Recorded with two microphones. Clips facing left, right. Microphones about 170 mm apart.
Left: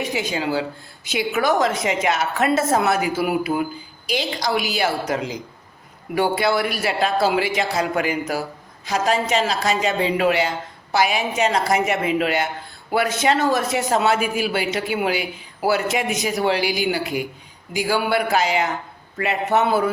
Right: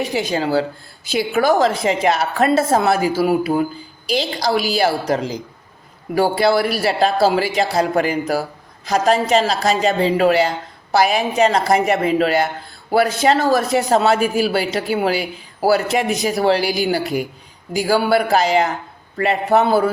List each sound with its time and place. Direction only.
0.0 s a woman's voice: 35° right (ahead or behind)